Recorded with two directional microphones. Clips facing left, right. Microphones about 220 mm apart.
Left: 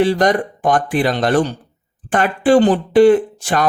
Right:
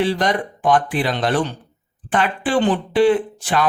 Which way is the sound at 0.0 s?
45° left (ahead or behind).